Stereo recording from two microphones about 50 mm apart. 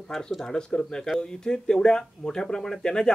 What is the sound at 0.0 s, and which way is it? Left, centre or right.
Speech, centre.